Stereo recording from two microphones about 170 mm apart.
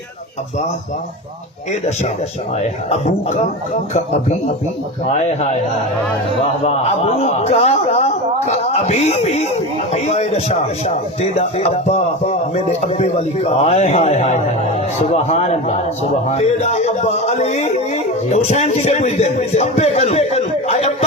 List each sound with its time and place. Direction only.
2.9 s a man's voice: 40° left (ahead or behind)
6.7 s a man's voice: 40° left (ahead or behind)